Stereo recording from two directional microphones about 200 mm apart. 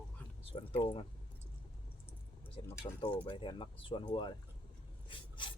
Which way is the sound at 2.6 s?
25° left (ahead or behind).